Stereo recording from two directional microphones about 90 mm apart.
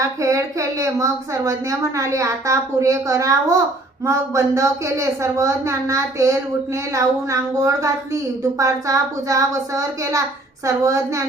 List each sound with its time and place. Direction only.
0.0 s a woman's voice: 35° right (ahead or behind)